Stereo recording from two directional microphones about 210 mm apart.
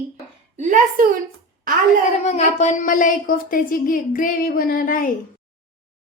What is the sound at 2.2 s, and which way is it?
A woman's voice, 30° left (ahead or behind).